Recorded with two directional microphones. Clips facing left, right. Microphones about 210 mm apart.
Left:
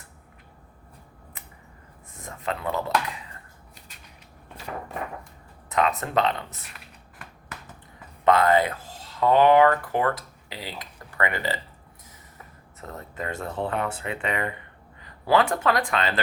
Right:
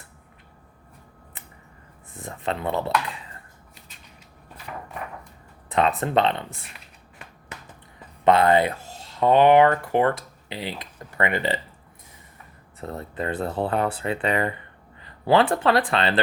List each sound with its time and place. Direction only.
2.2 s speech: 30° right (ahead or behind)
5.7 s speech: 30° right (ahead or behind)
8.2 s speech: 25° right (ahead or behind)
12.9 s speech: 30° right (ahead or behind)